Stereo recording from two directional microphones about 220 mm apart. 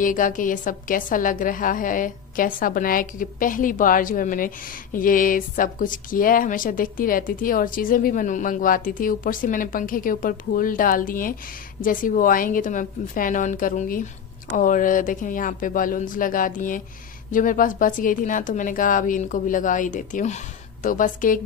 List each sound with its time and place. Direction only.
0.0 s speech: 35° left (ahead or behind)